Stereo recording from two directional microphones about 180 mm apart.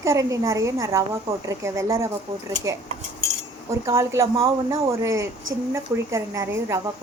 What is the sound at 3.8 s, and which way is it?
A woman's voice, 15° right (ahead or behind).